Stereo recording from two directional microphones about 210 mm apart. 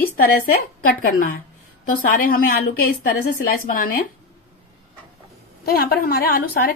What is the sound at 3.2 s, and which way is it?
Speech, 40° left (ahead or behind).